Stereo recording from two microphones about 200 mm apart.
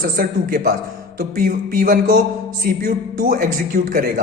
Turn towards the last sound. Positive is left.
turn(degrees=-45)  # may be behind; listen again after turning